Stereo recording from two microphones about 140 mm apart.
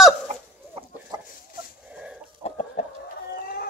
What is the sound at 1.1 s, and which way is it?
Chicken, 30° right (ahead or behind).